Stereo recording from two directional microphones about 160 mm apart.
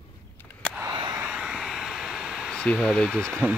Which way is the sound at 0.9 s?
25° right (ahead or behind).